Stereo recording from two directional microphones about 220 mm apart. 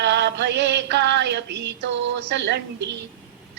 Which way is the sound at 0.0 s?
50° right (ahead or behind).